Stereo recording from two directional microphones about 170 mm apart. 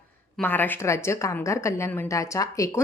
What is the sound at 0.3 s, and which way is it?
A woman's voice, 10° left (ahead or behind).